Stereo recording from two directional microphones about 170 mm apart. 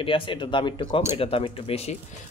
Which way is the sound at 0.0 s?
30° left (ahead or behind).